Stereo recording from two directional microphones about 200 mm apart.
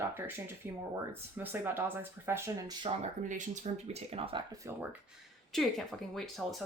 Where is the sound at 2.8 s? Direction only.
40° right (ahead or behind); by 6.6 s centre (ahead or behind).